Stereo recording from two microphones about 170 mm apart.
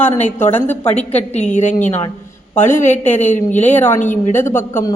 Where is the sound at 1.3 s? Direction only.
45° left (ahead or behind).